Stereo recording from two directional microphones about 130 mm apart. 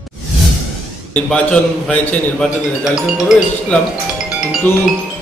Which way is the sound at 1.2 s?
10° left (ahead or behind).